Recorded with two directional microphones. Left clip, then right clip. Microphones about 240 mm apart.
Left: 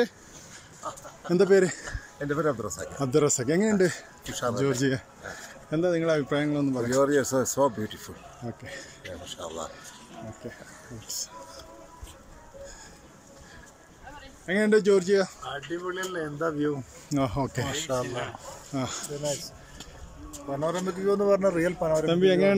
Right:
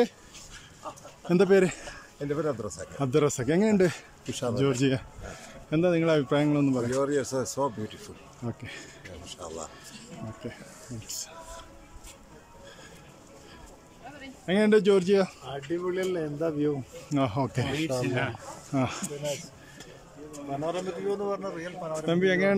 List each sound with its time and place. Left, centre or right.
1.2 s speech: centre
14.4 s speech: centre
15.4 s speech: centre
20.4 s speech: centre
21.2 s speech: centre
22.0 s speech: centre